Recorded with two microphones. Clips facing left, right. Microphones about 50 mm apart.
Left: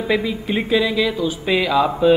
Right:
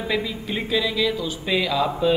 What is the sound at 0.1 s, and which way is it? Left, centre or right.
A man's voice, centre.